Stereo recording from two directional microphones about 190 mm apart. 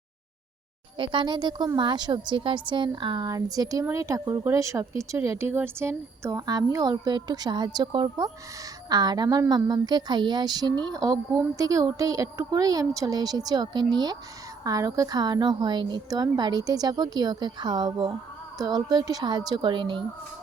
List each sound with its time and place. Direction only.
0.9 s a woman's voice: 25° right (ahead or behind)